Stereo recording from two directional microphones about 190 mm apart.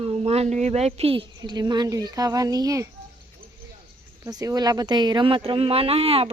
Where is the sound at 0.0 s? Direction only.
30° right (ahead or behind); by 2.9 s 15° right (ahead or behind).